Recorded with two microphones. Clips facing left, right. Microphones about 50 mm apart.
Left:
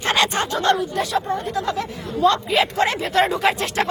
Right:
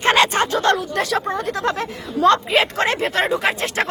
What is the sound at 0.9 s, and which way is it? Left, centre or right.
Speech, right.